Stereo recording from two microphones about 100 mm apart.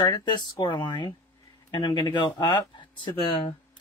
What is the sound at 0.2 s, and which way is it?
Speech, 50° left (ahead or behind).